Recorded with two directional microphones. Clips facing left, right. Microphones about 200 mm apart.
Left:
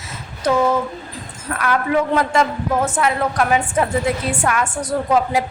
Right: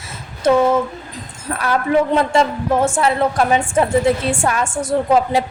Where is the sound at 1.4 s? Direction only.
30° right (ahead or behind).